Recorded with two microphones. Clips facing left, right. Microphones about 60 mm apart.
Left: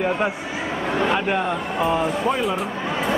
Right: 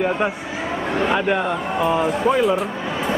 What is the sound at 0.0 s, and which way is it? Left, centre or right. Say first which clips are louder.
A man's voice: right 1 dB; centre.